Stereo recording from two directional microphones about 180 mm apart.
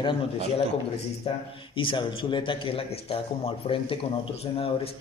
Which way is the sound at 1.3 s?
30° left (ahead or behind).